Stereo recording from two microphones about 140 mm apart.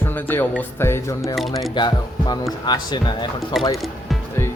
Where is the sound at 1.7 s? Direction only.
30° left (ahead or behind).